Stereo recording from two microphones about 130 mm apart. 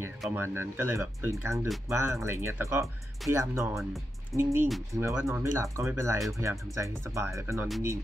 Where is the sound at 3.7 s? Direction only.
Centre (ahead or behind).